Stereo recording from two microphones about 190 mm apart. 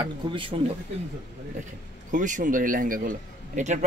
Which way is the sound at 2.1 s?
40° right (ahead or behind).